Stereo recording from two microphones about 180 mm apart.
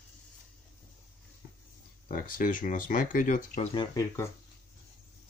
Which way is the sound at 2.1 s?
50° left (ahead or behind).